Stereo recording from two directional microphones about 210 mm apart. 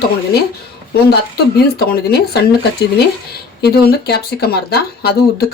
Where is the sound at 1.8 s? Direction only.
50° left (ahead or behind).